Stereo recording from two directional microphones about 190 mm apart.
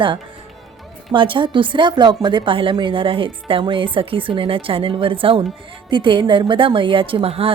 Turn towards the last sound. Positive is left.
turn(degrees=-30)  # may be behind; listen again after turning